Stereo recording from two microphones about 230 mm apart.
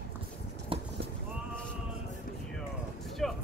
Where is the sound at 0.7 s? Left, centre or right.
Right.